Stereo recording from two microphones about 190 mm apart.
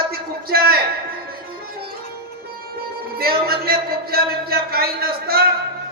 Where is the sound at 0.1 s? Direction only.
55° right (ahead or behind).